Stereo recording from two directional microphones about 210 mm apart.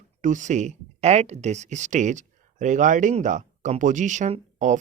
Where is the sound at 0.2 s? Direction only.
35° right (ahead or behind).